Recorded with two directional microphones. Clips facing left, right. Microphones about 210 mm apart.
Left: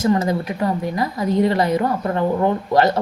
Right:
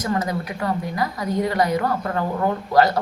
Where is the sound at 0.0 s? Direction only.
25° left (ahead or behind).